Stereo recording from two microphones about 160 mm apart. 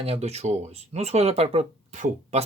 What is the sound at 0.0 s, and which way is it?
Speech, 40° right (ahead or behind).